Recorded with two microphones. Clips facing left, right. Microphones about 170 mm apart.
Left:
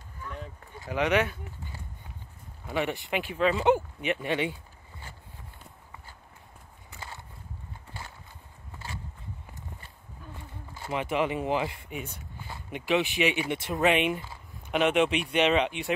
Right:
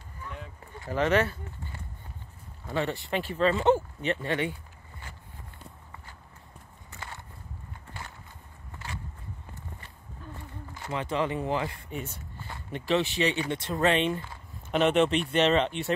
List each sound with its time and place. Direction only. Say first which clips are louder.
0.8 s speech: right 1 dB; 10° left (ahead or behind)
10.9 s speech: left 1 dB; 15° left (ahead or behind)
12.4 s a sound: right 1 dB; 10° left (ahead or behind)
13.0 s speech: even; 15° left (ahead or behind)
14.3 s speech: right 1 dB; 5° left (ahead or behind)